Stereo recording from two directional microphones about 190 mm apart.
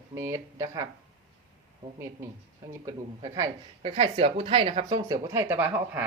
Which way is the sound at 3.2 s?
15° right (ahead or behind).